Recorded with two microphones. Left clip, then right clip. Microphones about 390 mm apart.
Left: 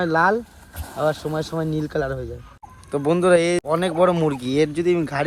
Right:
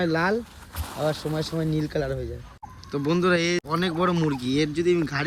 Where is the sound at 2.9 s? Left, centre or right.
Centre.